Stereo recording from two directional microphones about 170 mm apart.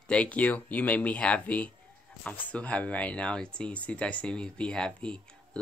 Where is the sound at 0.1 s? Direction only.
5° left (ahead or behind).